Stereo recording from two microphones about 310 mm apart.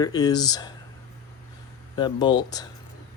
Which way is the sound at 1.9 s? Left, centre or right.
Centre.